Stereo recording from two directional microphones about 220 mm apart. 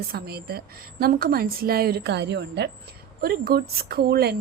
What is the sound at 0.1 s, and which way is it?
A woman's voice, 45° right (ahead or behind).